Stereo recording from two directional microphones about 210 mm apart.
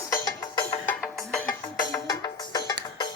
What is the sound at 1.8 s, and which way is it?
Music, 15° left (ahead or behind).